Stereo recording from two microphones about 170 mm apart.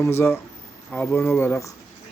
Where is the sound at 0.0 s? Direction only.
15° left (ahead or behind).